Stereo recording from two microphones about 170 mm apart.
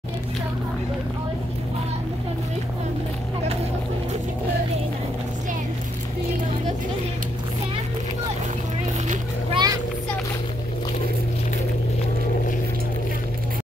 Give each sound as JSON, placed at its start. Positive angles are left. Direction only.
{"t": 9.5, "sound": "vehicle", "side_deg": -25}